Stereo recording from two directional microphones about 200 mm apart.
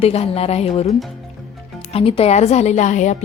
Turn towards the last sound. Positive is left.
turn(degrees=35)  # may be behind; listen again after turning